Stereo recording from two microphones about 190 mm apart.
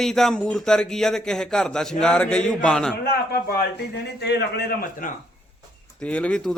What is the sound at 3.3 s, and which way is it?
A man's voice, 50° left (ahead or behind).